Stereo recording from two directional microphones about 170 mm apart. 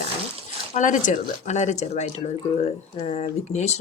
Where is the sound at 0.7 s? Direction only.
45° left (ahead or behind).